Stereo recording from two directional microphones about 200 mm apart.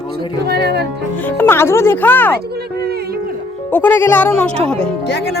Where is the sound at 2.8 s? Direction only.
50° right (ahead or behind).